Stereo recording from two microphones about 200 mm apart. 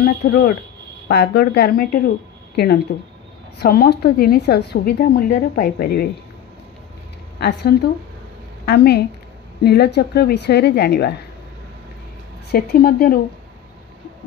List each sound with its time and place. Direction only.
0.0 s a woman's voice: 50° left (ahead or behind)
7.3 s a woman's voice: 55° left (ahead or behind)
12.4 s a woman's voice: 50° left (ahead or behind)